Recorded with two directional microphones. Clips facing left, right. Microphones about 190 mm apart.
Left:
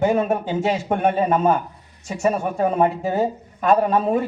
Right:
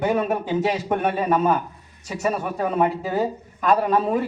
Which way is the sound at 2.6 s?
40° left (ahead or behind).